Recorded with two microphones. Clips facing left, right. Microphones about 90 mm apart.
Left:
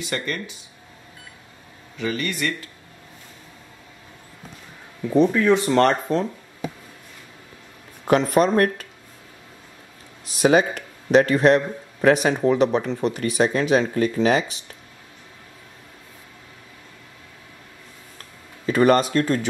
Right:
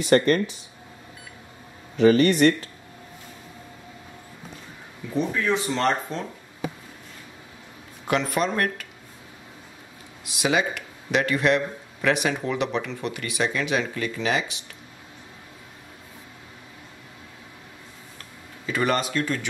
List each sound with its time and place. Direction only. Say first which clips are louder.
0.0 s speech: right 10 dB; 45° right (ahead or behind)
2.0 s speech: right 10 dB; 40° right (ahead or behind)
5.5 s speech: left 6 dB; 55° left (ahead or behind)
8.1 s speech: left 6 dB; 40° left (ahead or behind)
10.2 s speech: left 6 dB; 40° left (ahead or behind)
18.7 s speech: left 7 dB; 40° left (ahead or behind)